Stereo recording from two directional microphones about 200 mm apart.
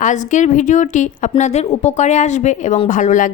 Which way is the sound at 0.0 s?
35° left (ahead or behind).